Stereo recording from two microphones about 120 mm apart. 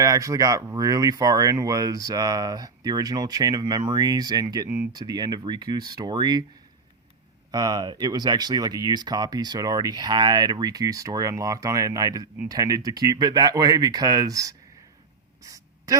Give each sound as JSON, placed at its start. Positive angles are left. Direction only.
{"t": 0.0, "sound": "speech", "side_deg": -30}
{"t": 7.5, "sound": "speech", "side_deg": -35}
{"t": 15.4, "sound": "gasp", "side_deg": -30}